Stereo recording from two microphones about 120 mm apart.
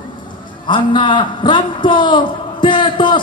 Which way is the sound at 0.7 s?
40° left (ahead or behind).